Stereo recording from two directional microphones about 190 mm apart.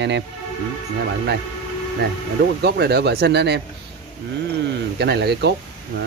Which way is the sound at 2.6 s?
60° right (ahead or behind).